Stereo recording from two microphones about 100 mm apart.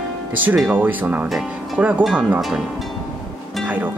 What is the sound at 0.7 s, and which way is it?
Speech, 15° right (ahead or behind).